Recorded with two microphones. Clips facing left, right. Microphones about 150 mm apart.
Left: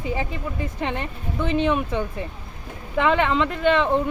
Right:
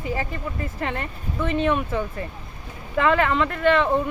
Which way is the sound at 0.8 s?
Centre (ahead or behind).